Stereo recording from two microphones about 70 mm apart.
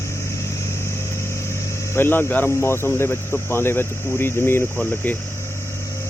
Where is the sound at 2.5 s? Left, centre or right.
Left.